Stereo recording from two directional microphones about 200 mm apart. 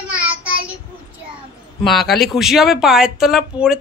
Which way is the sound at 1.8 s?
Centre (ahead or behind).